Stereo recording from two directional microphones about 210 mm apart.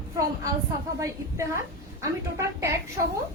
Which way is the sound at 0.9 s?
15° right (ahead or behind).